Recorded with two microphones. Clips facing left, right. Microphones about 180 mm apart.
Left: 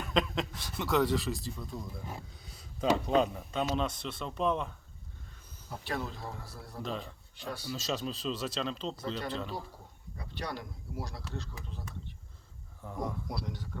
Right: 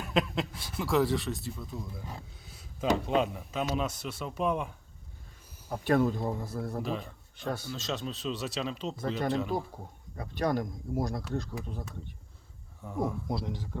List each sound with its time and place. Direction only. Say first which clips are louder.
0.1 s speech: right 2 dB; 5° right (ahead or behind)
5.6 s speech: right 11 dB; 50° right (ahead or behind)
6.8 s speech: right 3 dB; 5° right (ahead or behind)
7.4 s speech: right 6 dB; 50° right (ahead or behind)
7.7 s speech: even; centre (ahead or behind)
9.5 s speech: right 8 dB; 50° right (ahead or behind)
12.8 s speech: right 5 dB; 5° right (ahead or behind)
13.2 s speech: right 5 dB; 25° right (ahead or behind)